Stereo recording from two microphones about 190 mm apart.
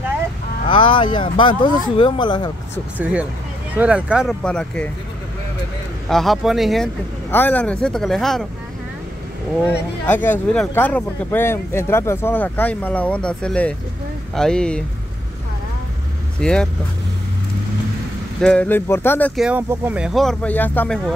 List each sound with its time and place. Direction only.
0.7 s speech: 25° left (ahead or behind)
3.0 s speech: 5° right (ahead or behind)
6.0 s speech: centre (ahead or behind)
7.2 s speech: 10° left (ahead or behind)
10.0 s speech: 10° left (ahead or behind)
16.3 s speech: 5° left (ahead or behind)
18.4 s speech: 5° left (ahead or behind)
19.4 s speech: 10° right (ahead or behind); by 21.0 s 10° left (ahead or behind)